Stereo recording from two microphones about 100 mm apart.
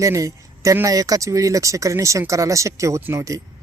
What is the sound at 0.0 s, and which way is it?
Speech, 35° right (ahead or behind).